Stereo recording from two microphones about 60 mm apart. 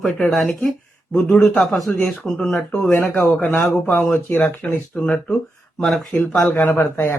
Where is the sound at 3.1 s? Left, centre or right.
Left.